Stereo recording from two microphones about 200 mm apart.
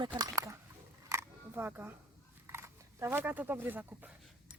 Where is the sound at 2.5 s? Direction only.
15° right (ahead or behind).